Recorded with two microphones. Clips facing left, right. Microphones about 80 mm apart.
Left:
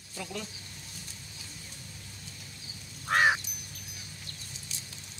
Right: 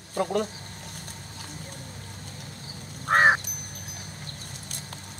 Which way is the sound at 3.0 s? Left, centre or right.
Right.